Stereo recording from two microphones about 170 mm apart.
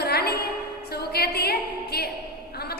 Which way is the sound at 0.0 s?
65° left (ahead or behind).